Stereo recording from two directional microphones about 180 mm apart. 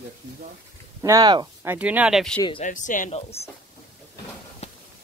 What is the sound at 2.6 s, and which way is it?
Speech, 45° left (ahead or behind).